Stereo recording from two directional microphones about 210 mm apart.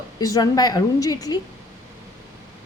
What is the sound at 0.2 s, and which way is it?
A woman's voice, 15° left (ahead or behind).